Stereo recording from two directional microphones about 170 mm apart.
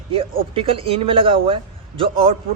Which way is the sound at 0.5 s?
35° right (ahead or behind).